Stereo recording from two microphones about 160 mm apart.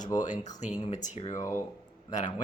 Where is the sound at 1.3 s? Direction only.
20° left (ahead or behind).